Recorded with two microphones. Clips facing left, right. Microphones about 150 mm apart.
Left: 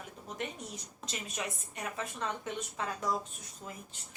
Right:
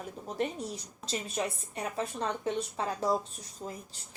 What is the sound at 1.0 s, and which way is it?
A woman's voice, 35° right (ahead or behind).